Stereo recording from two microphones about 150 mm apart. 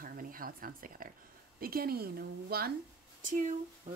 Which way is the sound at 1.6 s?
85° right.